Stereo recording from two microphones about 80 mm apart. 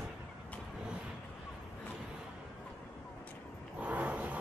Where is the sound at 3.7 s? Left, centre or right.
Centre.